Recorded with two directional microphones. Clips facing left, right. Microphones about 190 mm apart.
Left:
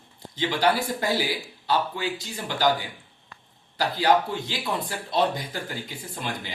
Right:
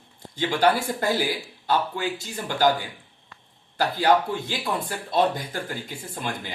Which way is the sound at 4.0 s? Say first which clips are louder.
Right 1 dB; 50° right (ahead or behind).